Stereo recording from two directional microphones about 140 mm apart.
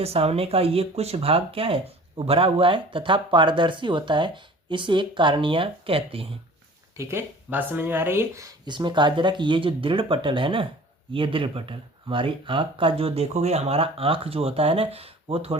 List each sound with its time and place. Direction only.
0.0 s speech: 45° right (ahead or behind)
6.9 s speech: 20° right (ahead or behind); by 15.5 s 45° right (ahead or behind)